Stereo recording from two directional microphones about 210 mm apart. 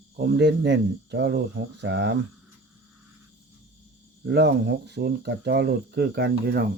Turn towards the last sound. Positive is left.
turn(degrees=-50)  # may be behind; listen again after turning